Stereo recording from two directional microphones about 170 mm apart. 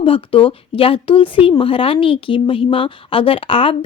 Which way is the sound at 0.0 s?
30° left (ahead or behind).